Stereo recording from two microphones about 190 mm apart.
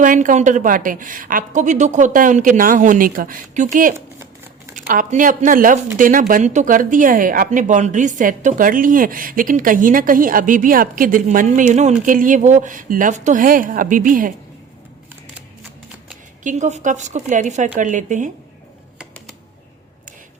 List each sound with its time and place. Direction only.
0.0 s a woman's voice: 40° right (ahead or behind)
3.9 s a sound: 15° right (ahead or behind)
4.7 s a woman's voice: 45° right (ahead or behind)
16.4 s speech: 40° right (ahead or behind)